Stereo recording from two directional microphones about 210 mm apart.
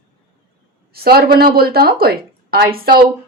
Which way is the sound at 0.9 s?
45° right (ahead or behind).